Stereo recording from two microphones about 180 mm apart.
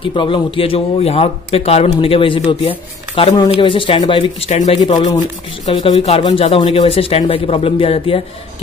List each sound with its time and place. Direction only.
0.0 s speech: 25° left (ahead or behind)
4.7 s speech: 25° left (ahead or behind)